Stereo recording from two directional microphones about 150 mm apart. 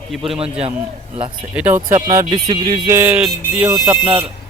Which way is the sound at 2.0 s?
25° right (ahead or behind).